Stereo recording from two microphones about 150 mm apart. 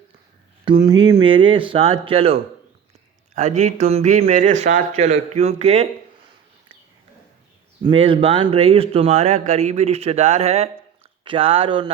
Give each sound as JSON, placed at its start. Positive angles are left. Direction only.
{"t": 0.6, "sound": "speech", "side_deg": -30}
{"t": 3.3, "sound": "speech", "side_deg": -50}
{"t": 7.9, "sound": "speech", "side_deg": -35}